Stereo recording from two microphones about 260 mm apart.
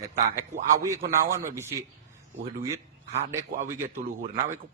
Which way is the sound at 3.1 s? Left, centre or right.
Right.